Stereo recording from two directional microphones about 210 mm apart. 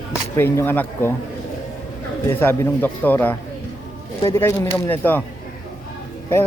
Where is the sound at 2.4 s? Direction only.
10° left (ahead or behind).